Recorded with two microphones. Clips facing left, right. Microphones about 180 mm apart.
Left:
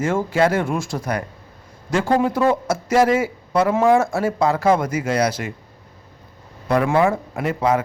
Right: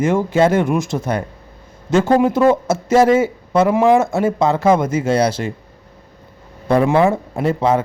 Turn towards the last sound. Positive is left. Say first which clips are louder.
# right 3 dB
turn(degrees=-25)  # may be behind; listen again after turning